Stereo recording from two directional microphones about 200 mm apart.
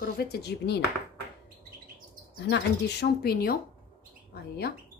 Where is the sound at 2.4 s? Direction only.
55° left (ahead or behind).